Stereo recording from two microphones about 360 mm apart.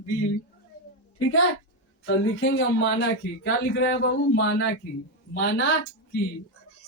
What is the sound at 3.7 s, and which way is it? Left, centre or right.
Speech, left.